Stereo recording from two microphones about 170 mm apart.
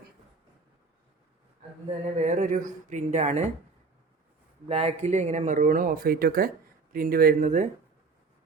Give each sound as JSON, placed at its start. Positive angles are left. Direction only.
{"t": 2.1, "sound": "speech", "side_deg": -45}
{"t": 4.7, "sound": "speech", "side_deg": -35}